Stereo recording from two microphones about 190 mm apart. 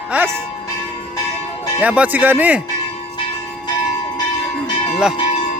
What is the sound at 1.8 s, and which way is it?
Speech, 5° right (ahead or behind).